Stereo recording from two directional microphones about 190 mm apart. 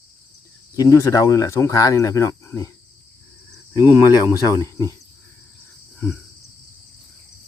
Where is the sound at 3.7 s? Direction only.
20° left (ahead or behind).